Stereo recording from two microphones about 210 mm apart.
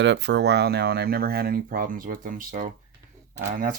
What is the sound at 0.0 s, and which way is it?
Speech, 55° right (ahead or behind).